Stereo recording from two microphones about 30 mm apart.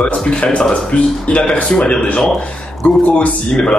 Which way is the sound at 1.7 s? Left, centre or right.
Left.